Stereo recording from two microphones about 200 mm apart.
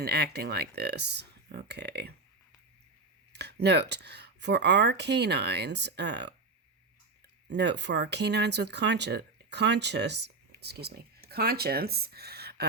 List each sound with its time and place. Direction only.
0.0 s speech: 55° right (ahead or behind)
3.3 s speech: 55° right (ahead or behind)
7.4 s speech: 60° right (ahead or behind)